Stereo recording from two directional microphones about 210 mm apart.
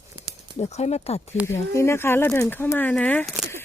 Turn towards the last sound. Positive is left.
turn(degrees=10)  # may be behind; listen again after turning